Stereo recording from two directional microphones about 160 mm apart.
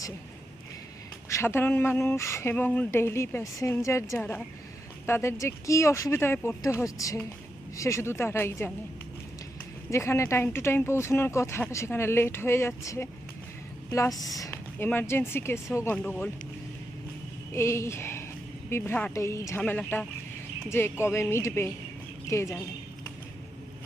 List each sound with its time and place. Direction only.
1.3 s speech: 15° left (ahead or behind)
9.9 s speech: 15° left (ahead or behind)
14.1 s speech: centre (ahead or behind)
14.3 s speech: 20° left (ahead or behind)
17.5 s speech: 15° left (ahead or behind)